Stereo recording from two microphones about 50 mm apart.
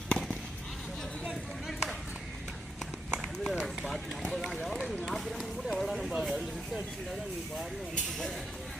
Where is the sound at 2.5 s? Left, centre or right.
Centre.